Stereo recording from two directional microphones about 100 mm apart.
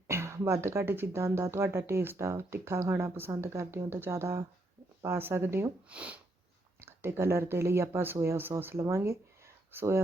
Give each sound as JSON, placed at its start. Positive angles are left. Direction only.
{"t": 0.1, "sound": "speech", "side_deg": -25}
{"t": 5.9, "sound": "sniff", "side_deg": -15}
{"t": 6.8, "sound": "speech", "side_deg": -25}